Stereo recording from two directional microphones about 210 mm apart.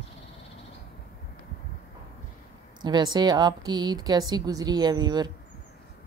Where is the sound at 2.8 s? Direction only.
20° right (ahead or behind).